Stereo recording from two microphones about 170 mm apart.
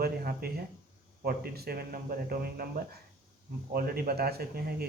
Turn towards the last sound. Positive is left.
turn(degrees=-65)  # may be behind; listen again after turning